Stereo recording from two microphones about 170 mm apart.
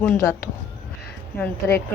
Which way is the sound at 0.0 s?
15° left (ahead or behind).